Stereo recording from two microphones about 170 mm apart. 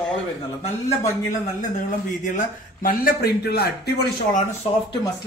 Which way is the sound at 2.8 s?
55° left (ahead or behind).